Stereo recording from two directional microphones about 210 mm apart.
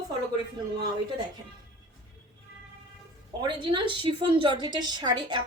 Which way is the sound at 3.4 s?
20° right (ahead or behind).